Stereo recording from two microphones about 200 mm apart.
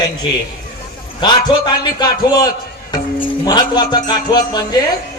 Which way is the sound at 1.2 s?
20° left (ahead or behind).